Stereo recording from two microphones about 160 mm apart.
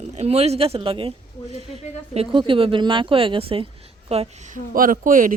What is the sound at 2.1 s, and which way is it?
Speech, 30° right (ahead or behind).